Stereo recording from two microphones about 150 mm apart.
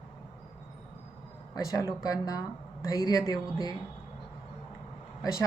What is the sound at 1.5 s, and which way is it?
A woman's voice, 25° left (ahead or behind).